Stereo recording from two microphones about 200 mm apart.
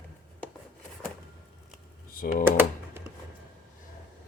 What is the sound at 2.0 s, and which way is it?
Computer keyboard, 45° left (ahead or behind).